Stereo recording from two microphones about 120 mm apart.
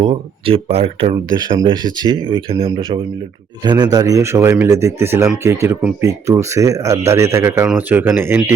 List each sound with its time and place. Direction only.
0.0 s speech: 45° right (ahead or behind)
1.4 s speech: 40° right (ahead or behind)
2.2 s speech: 50° right (ahead or behind)
3.6 s speech: 35° right (ahead or behind); by 8.4 s 20° right (ahead or behind)